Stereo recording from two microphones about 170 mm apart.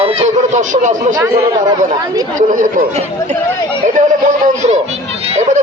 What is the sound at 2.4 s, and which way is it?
A child's voice, 50° right (ahead or behind).